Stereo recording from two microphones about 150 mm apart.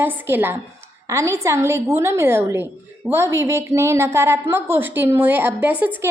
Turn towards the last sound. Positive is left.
turn(degrees=-10)  # may be behind; listen again after turning